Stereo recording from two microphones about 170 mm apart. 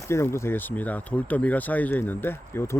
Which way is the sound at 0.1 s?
15° left (ahead or behind).